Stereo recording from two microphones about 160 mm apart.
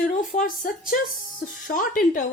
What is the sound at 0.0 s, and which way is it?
A woman's voice, 55° left (ahead or behind).